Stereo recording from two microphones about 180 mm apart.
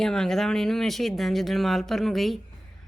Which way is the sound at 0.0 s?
5° left (ahead or behind).